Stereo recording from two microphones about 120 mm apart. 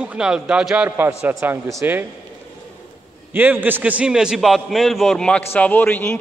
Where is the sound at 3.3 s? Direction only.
15° right (ahead or behind).